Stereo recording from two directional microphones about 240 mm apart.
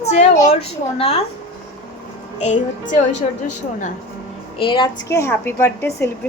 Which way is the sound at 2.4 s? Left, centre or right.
Left.